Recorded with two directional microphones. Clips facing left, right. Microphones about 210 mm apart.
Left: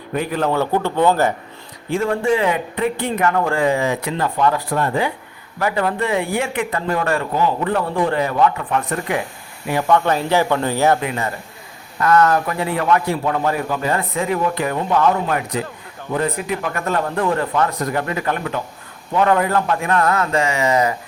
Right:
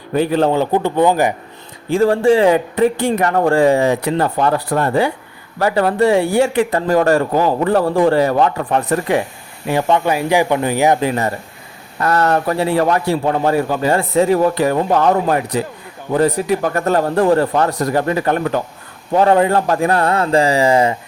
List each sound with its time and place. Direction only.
0.1 s a man's voice: 30° right (ahead or behind)
0.5 s speech: 15° right (ahead or behind)
1.9 s a man's voice: 35° right (ahead or behind)
10.1 s speech: 10° right (ahead or behind)
11.0 s a man's voice: 35° right (ahead or behind)